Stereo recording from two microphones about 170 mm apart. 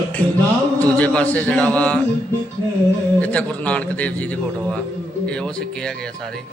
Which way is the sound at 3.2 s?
10° left (ahead or behind).